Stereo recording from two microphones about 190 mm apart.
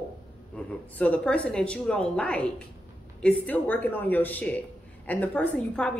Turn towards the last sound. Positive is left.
turn(degrees=5)  # may be behind; listen again after turning